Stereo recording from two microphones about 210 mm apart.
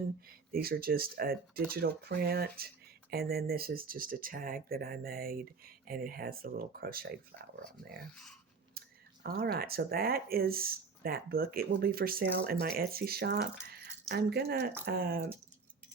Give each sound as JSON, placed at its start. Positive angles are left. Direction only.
{"t": 0.3, "sound": "speech", "side_deg": -45}
{"t": 8.1, "sound": "speech", "side_deg": 0}
{"t": 8.8, "sound": "clicking", "side_deg": -45}
{"t": 9.2, "sound": "speech", "side_deg": -45}